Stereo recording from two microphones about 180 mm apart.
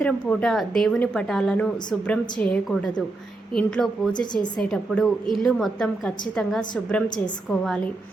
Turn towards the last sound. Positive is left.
turn(degrees=5)  # may be behind; listen again after turning